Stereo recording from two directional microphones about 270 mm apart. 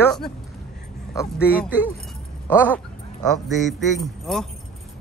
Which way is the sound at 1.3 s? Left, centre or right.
Centre.